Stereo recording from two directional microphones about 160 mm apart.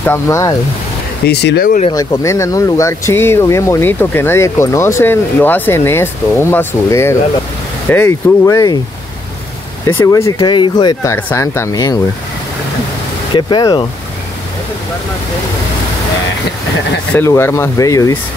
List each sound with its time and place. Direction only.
0.0 s speech: 15° left (ahead or behind)
1.2 s speech: 90° left
1.9 s speech: 20° left (ahead or behind)
9.8 s speech: 15° left (ahead or behind)
13.3 s speech: 30° left (ahead or behind)
17.1 s speech: 15° left (ahead or behind)